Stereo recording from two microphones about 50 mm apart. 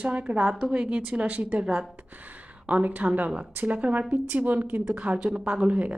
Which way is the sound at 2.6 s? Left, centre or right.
Right.